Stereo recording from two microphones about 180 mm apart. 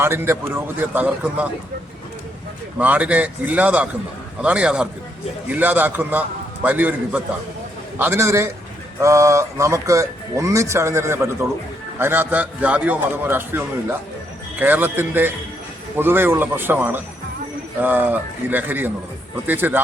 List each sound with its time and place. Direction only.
0.0 s speech: 15° right (ahead or behind)
2.7 s a man's voice: 10° right (ahead or behind)